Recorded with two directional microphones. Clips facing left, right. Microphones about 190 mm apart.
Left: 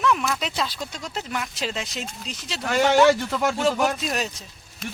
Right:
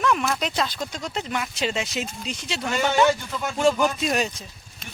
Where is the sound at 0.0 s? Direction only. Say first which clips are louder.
Even; centre (ahead or behind).